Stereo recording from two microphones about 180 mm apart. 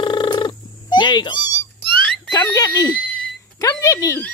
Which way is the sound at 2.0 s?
5° left (ahead or behind).